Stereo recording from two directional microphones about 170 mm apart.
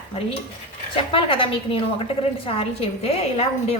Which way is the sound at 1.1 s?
30° left (ahead or behind).